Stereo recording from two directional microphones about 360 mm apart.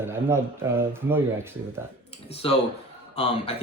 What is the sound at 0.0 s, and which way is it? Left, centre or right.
Speech, centre.